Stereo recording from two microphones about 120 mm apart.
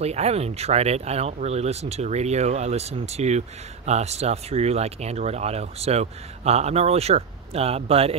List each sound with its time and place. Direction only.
0.0 s speech: 60° right (ahead or behind)